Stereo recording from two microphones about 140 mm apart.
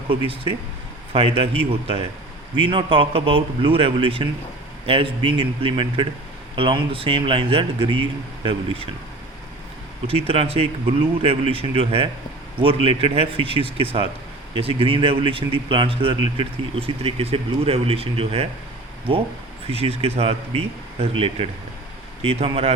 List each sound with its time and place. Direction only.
0.1 s speech: 40° right (ahead or behind)
10.1 s speech: 40° right (ahead or behind)
19.6 s speech: 45° right (ahead or behind)